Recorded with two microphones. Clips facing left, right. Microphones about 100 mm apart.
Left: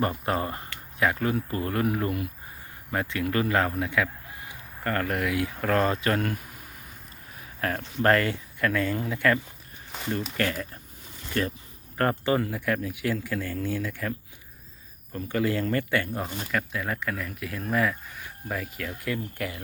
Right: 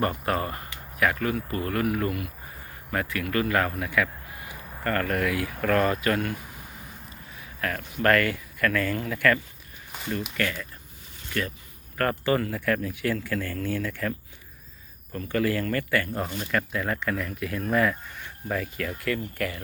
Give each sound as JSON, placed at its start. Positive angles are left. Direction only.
{"t": 0.0, "sound": "a man's voice", "side_deg": 20}
{"t": 7.6, "sound": "speech", "side_deg": 30}
{"t": 11.9, "sound": "speech", "side_deg": 20}
{"t": 15.1, "sound": "speech", "side_deg": 15}
{"t": 16.2, "sound": "speech", "side_deg": 5}
{"t": 19.0, "sound": "speech", "side_deg": 15}